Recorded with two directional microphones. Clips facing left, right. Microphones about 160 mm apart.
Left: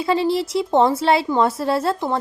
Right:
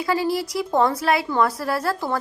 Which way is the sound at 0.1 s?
25° left (ahead or behind).